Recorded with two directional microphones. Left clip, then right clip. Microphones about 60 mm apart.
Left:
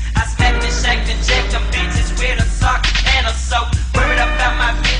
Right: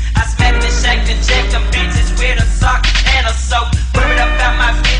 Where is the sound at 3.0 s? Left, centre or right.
Left.